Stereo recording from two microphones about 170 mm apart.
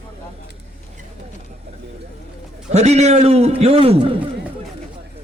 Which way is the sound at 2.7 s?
40° right (ahead or behind).